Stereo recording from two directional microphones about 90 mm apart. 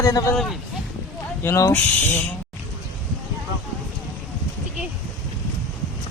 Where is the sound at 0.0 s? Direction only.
40° left (ahead or behind).